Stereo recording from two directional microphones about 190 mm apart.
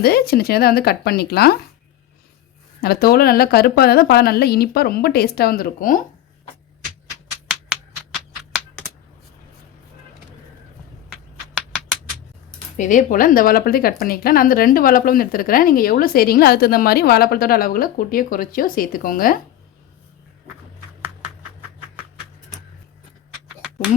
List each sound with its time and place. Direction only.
0.0 s a woman's voice: 55° left (ahead or behind)
2.8 s a woman's voice: 55° left (ahead or behind)
11.1 s a sound: centre (ahead or behind)
12.7 s speech: 40° left (ahead or behind)